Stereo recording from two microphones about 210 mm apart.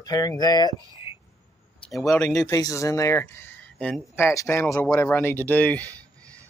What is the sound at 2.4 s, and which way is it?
Speech, 15° left (ahead or behind).